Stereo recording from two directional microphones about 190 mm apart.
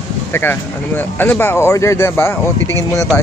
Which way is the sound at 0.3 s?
10° left (ahead or behind).